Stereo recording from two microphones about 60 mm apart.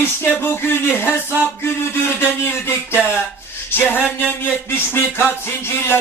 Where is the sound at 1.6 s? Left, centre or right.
Left.